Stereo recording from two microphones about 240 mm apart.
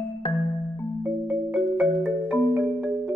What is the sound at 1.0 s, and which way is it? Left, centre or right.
Music, centre.